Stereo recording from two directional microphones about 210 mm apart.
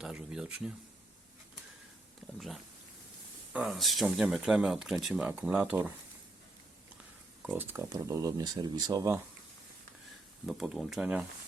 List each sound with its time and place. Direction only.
0.0 s speech: 5° right (ahead or behind)
3.5 s speech: centre (ahead or behind)
7.4 s speech: 10° right (ahead or behind)
10.4 s speech: centre (ahead or behind)